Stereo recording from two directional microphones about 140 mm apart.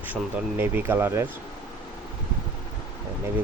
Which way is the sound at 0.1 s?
15° right (ahead or behind).